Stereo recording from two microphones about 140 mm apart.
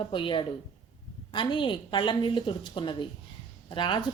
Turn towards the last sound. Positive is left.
turn(degrees=35)  # may be behind; listen again after turning